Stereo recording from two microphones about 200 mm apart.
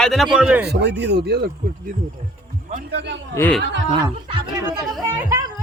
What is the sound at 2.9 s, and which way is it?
Speech, 55° right (ahead or behind).